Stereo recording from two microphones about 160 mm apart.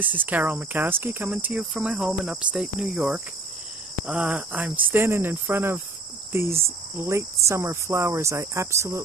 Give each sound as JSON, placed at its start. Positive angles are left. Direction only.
{"t": 0.0, "sound": "cricket", "side_deg": -10}